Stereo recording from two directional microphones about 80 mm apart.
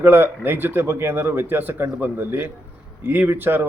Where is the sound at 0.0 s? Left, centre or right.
Right.